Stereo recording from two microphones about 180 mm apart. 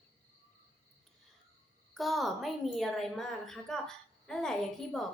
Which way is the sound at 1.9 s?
Centre (ahead or behind).